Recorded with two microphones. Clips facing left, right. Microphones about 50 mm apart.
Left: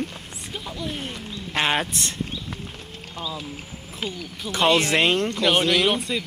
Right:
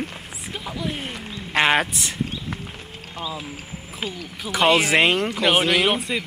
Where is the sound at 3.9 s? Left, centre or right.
Centre.